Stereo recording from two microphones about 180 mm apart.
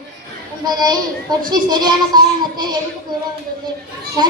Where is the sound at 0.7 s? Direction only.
20° right (ahead or behind).